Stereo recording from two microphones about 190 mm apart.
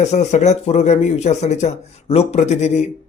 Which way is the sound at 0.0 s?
35° left (ahead or behind).